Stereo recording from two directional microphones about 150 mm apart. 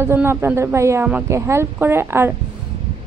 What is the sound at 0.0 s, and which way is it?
A woman's voice, 15° right (ahead or behind).